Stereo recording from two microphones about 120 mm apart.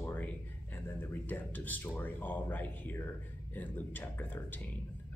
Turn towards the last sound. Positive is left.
turn(degrees=15)  # may be behind; listen again after turning